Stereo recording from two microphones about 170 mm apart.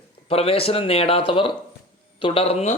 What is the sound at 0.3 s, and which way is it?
Speech, 35° left (ahead or behind).